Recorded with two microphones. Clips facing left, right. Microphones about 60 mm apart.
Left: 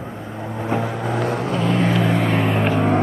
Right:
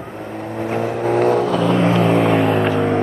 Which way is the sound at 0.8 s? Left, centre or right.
Right.